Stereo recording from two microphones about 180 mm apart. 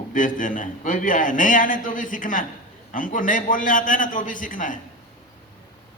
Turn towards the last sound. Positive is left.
turn(degrees=45)  # may be behind; listen again after turning